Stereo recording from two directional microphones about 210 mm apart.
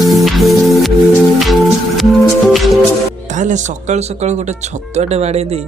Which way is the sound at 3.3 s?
35° right (ahead or behind).